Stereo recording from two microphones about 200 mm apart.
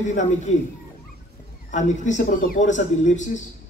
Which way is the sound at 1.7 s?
35° left (ahead or behind).